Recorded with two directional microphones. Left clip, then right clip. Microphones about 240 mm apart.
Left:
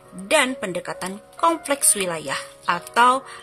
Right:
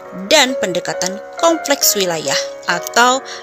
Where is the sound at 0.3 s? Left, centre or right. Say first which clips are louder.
Right 7 dB; right.